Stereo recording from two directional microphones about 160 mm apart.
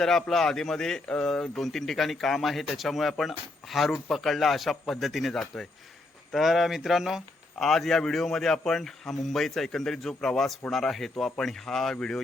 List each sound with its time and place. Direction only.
0.0 s speech: 5° left (ahead or behind)